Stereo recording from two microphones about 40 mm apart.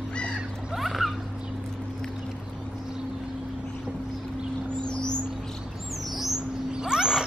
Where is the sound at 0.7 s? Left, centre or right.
Centre.